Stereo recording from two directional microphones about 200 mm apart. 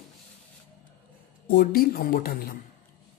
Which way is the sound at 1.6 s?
45° left (ahead or behind).